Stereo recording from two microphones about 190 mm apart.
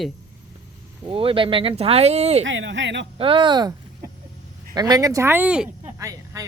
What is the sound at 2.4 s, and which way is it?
Speech, 80° right.